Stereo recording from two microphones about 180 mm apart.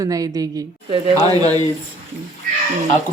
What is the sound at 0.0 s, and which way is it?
Speech, 20° right (ahead or behind).